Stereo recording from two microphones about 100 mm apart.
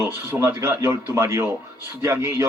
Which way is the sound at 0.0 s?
25° right (ahead or behind).